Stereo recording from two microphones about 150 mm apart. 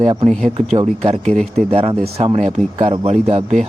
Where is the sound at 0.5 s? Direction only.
45° right (ahead or behind).